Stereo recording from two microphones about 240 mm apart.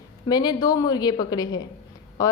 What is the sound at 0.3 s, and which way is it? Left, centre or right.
Speech, centre.